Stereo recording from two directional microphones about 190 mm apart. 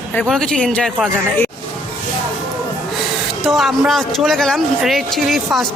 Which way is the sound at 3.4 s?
Centre (ahead or behind).